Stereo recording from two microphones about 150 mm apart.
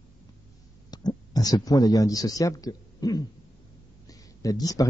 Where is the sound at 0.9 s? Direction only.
25° left (ahead or behind).